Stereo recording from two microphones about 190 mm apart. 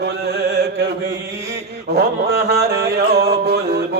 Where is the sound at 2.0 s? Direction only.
55° right (ahead or behind).